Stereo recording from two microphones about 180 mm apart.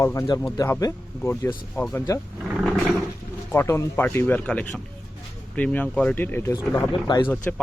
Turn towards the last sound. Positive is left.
turn(degrees=10)  # may be behind; listen again after turning